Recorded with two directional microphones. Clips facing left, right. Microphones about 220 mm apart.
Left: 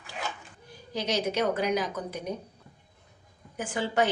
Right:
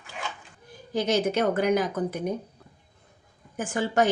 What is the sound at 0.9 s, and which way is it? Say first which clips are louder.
Dishes: right 4 dB; 50° right (ahead or behind).